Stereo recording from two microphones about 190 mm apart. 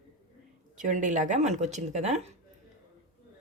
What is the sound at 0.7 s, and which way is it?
A woman's voice, 40° right (ahead or behind).